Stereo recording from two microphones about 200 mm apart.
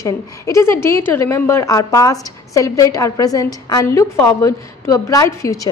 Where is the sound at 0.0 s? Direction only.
15° left (ahead or behind).